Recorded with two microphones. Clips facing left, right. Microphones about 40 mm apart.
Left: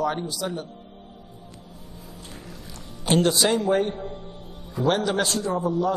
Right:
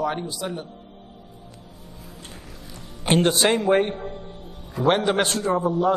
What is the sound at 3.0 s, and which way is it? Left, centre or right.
Speech, right.